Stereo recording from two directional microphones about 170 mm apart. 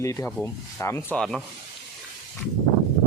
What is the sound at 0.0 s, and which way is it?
Speech, 15° left (ahead or behind).